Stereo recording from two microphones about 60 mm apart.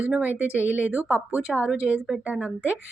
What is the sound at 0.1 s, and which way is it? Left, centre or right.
A woman's voice, right.